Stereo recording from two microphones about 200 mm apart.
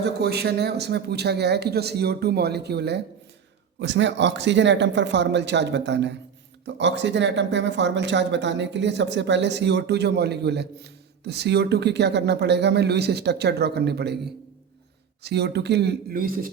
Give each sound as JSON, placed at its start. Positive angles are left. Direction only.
{"t": 0.0, "sound": "speech", "side_deg": -55}
{"t": 15.2, "sound": "speech", "side_deg": -55}